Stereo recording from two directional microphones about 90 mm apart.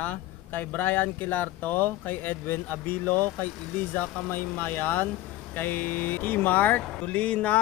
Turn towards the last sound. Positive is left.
turn(degrees=15)  # may be behind; listen again after turning